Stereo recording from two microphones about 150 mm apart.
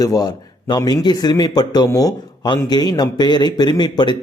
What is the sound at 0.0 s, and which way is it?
A man's voice, 25° left (ahead or behind).